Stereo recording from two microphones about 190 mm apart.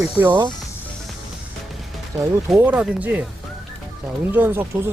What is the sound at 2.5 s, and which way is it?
Speech, 5° right (ahead or behind).